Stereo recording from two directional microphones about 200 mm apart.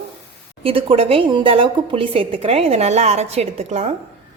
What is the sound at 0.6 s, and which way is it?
A woman's voice, 25° right (ahead or behind).